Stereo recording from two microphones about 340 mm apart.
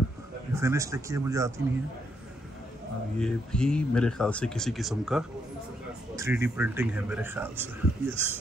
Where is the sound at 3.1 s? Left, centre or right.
Centre.